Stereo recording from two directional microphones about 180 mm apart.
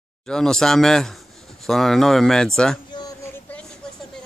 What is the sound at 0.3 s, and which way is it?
Speech, 5° left (ahead or behind).